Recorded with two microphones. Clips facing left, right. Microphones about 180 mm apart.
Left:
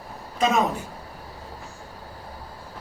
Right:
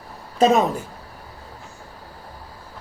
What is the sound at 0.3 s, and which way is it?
Speech, 35° right (ahead or behind).